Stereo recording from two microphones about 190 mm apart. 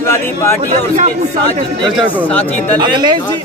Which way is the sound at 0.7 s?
40° right (ahead or behind).